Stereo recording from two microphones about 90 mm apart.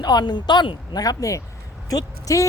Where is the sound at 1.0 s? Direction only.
40° left (ahead or behind).